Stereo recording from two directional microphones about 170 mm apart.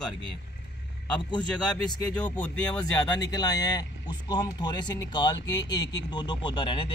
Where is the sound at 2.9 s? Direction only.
25° left (ahead or behind).